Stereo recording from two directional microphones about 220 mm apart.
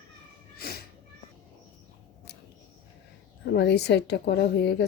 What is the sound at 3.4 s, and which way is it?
A woman's voice, 50° left (ahead or behind).